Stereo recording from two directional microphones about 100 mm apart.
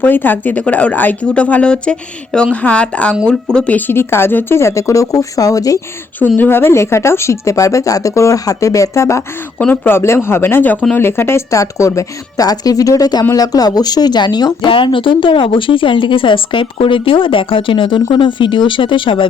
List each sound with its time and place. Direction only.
0.0 s speech: 20° left (ahead or behind); by 5.8 s 35° left (ahead or behind)
6.1 s speech: 15° left (ahead or behind)
9.6 s speech: 10° left (ahead or behind)
9.9 s speech: 25° left (ahead or behind); by 14.7 s 45° left (ahead or behind)
14.7 s speech: 60° left (ahead or behind)